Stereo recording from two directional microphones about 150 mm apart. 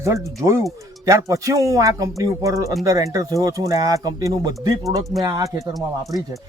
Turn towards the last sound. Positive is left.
turn(degrees=-25)  # may be behind; listen again after turning